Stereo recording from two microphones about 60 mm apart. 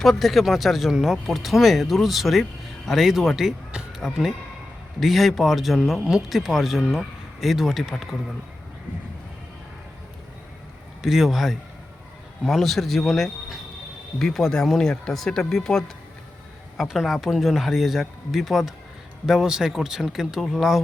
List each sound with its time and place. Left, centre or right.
0.0 s speech: centre
3.7 s a sound: centre
4.9 s speech: centre
11.0 s speech: centre